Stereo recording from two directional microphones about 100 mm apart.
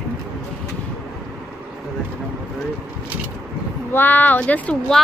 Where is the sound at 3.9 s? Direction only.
20° left (ahead or behind).